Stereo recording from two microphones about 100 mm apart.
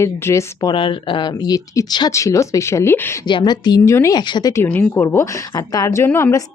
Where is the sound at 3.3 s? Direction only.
50° left (ahead or behind).